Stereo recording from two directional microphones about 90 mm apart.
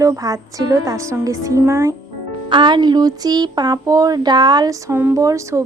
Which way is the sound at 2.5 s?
60° right (ahead or behind).